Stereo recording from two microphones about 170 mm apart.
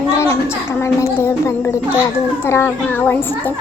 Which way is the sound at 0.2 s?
15° left (ahead or behind).